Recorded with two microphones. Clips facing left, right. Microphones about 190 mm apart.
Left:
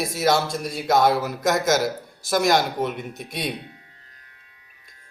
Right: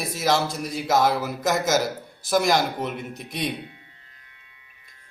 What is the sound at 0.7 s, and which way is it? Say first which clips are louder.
A man's voice: left 2 dB; centre (ahead or behind).